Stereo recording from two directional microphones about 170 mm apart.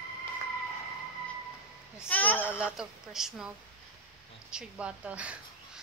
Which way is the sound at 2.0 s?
10° left (ahead or behind).